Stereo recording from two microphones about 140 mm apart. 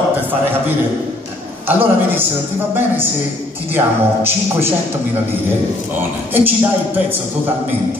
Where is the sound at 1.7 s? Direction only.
15° right (ahead or behind).